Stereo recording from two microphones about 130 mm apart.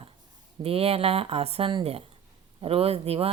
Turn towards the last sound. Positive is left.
turn(degrees=-50)  # may be behind; listen again after turning